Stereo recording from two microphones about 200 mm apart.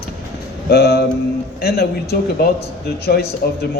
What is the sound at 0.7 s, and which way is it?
Speech, 50° left (ahead or behind).